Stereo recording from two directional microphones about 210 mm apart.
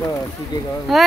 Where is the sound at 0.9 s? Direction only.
Centre (ahead or behind).